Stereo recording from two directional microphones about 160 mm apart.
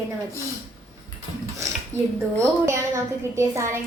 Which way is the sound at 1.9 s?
45° right (ahead or behind).